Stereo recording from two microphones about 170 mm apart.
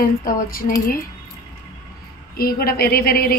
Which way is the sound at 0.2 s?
55° left (ahead or behind).